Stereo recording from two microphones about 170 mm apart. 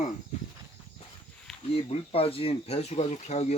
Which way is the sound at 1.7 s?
35° left (ahead or behind).